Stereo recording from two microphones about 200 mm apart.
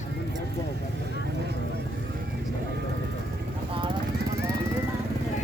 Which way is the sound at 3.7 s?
25° right (ahead or behind).